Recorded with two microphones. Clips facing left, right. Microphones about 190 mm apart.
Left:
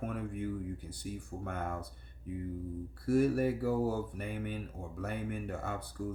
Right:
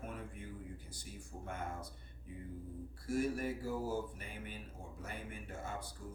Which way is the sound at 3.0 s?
60° left (ahead or behind).